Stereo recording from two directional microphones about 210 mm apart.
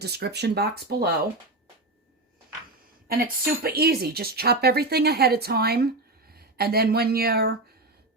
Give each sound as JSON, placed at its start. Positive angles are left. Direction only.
{"t": 0.0, "sound": "speech", "side_deg": -50}
{"t": 3.1, "sound": "speech", "side_deg": -45}